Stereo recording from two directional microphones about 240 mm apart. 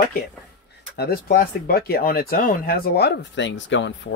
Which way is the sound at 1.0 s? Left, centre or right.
Left.